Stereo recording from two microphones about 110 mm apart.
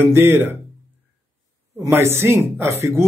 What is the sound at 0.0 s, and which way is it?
Speech, 20° right (ahead or behind).